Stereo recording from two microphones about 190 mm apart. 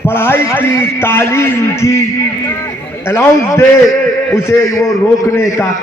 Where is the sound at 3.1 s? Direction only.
15° left (ahead or behind).